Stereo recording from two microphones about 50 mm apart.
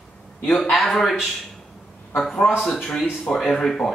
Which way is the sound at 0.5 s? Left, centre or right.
Centre.